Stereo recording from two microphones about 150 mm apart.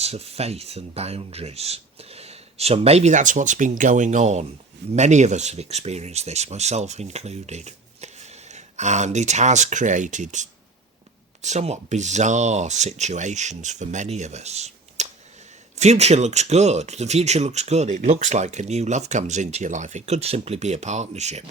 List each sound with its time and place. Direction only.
0.0 s speech: 45° right (ahead or behind)